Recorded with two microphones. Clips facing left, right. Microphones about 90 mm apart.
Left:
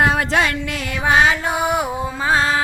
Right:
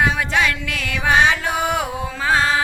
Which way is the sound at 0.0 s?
50° left (ahead or behind).